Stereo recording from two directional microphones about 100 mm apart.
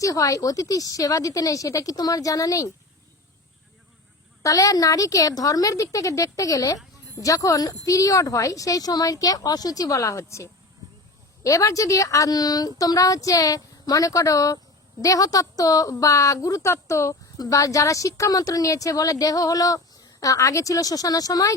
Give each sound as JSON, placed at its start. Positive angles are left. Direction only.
{"t": 0.0, "sound": "a woman's voice", "side_deg": 35}
{"t": 4.4, "sound": "a woman's voice", "side_deg": 35}